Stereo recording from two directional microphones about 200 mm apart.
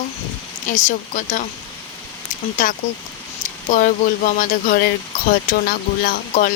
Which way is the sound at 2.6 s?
40° left (ahead or behind).